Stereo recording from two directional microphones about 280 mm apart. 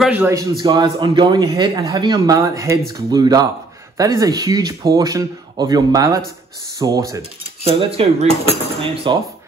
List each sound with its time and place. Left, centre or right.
0.0 s speech: centre
7.6 s cutlery: right